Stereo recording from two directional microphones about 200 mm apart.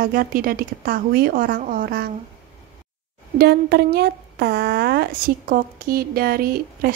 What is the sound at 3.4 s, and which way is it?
Speech, 50° right (ahead or behind).